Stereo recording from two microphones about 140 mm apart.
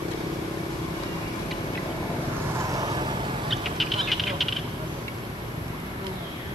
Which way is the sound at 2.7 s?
25° right (ahead or behind).